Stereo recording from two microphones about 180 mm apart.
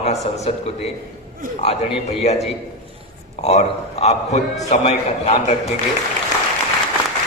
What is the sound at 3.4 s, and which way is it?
A man's voice, 35° left (ahead or behind).